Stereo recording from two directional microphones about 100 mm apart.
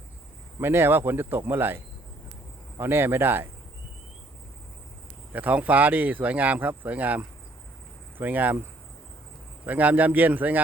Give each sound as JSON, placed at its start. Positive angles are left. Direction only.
{"t": 0.6, "sound": "speech", "side_deg": -20}
{"t": 5.3, "sound": "speech", "side_deg": -15}
{"t": 9.6, "sound": "speech", "side_deg": -15}